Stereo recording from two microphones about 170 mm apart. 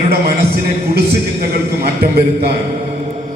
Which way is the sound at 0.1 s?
65° right (ahead or behind).